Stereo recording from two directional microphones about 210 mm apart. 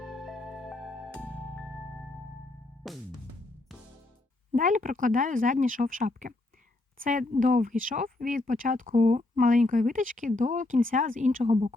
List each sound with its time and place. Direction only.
0.0 s music: centre (ahead or behind)
4.5 s speech: 40° right (ahead or behind)